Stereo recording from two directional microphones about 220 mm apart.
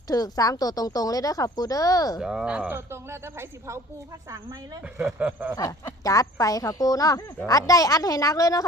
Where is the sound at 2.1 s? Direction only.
5° right (ahead or behind).